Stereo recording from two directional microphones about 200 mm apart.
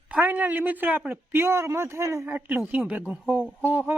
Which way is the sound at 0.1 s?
10° right (ahead or behind).